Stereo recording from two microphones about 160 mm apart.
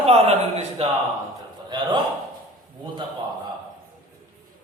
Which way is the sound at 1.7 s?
25° right (ahead or behind).